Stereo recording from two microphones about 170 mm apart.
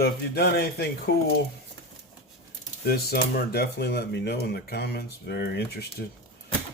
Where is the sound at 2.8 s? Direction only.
65° left (ahead or behind).